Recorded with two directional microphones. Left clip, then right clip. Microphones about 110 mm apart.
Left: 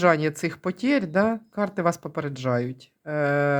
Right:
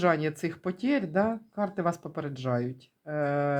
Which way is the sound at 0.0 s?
40° left (ahead or behind).